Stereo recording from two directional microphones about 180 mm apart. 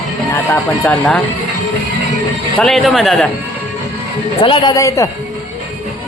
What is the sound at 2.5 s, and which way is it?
Speech, centre (ahead or behind).